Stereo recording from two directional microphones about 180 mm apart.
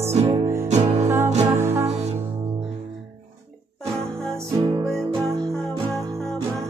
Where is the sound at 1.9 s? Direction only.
35° right (ahead or behind).